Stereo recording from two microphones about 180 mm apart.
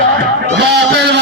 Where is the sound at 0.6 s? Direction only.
70° right (ahead or behind).